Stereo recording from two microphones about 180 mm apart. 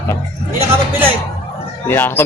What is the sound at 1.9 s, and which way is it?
Speech, 10° left (ahead or behind).